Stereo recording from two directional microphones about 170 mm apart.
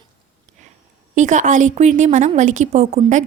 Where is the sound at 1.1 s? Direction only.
45° right (ahead or behind).